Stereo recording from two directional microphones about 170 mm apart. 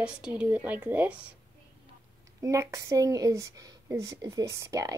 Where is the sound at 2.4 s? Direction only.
20° right (ahead or behind).